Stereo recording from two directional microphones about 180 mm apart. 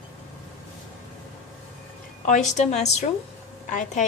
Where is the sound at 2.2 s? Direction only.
40° left (ahead or behind).